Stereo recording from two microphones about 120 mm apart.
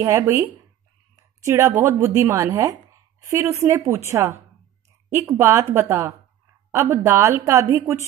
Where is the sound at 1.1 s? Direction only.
25° right (ahead or behind).